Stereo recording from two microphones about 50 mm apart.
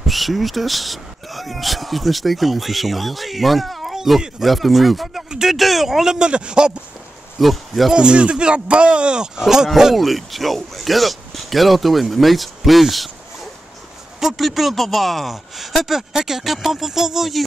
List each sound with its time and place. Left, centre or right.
0.0 s a man's voice: centre
7.3 s speech: centre
7.9 s speech: centre
9.9 s speech: centre